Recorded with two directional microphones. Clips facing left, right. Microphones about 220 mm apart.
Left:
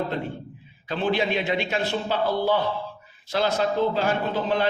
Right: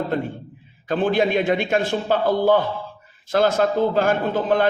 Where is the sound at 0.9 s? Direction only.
50° right (ahead or behind).